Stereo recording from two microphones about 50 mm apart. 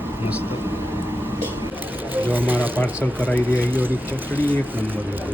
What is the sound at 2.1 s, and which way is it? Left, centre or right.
Speech, right.